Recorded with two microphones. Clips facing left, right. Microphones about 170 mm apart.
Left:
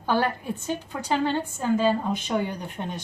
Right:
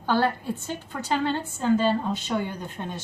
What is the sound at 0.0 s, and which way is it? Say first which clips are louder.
Speech: right 1 dB; 15° left (ahead or behind).